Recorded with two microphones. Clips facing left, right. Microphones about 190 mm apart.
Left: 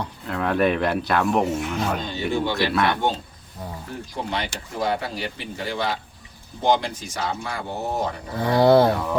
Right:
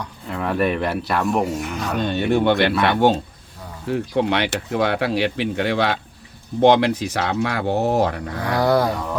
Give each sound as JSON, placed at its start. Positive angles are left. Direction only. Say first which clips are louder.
{"t": 0.3, "sound": "speech", "louder": "even", "side_deg": 0}
{"t": 2.0, "sound": "speech", "louder": "right 6 dB", "side_deg": -65}
{"t": 8.5, "sound": "speech", "louder": "left 3 dB", "side_deg": 25}